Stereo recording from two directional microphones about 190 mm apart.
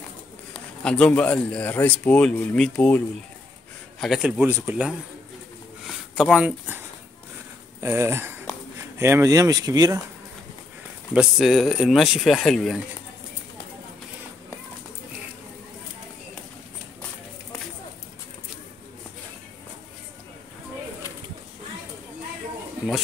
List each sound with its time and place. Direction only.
0.5 s speech: 5° left (ahead or behind)
4.0 s speech: 5° right (ahead or behind)
6.1 s speech: 5° right (ahead or behind)
7.8 s speech: 15° right (ahead or behind)
11.1 s speech: centre (ahead or behind)